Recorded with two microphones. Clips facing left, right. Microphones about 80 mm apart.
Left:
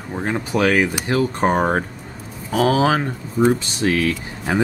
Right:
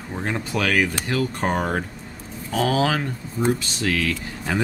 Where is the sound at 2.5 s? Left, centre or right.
Centre.